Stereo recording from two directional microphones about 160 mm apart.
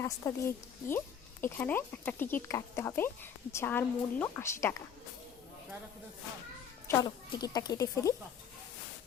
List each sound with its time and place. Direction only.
0.0 s speech: 15° left (ahead or behind)
6.8 s speech: 20° left (ahead or behind)